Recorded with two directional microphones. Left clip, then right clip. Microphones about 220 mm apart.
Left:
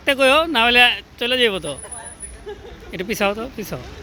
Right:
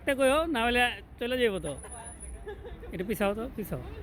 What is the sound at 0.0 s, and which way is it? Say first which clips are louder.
Speech: left 10 dB; 5° right (ahead or behind).